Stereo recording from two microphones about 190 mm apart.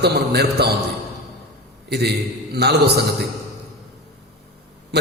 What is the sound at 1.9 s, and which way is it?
A man's voice, 60° right (ahead or behind).